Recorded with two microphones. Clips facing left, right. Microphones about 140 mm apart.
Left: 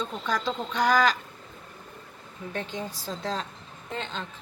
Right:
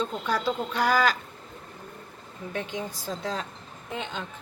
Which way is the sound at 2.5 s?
10° right (ahead or behind).